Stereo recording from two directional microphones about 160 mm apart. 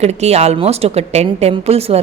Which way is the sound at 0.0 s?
40° right (ahead or behind).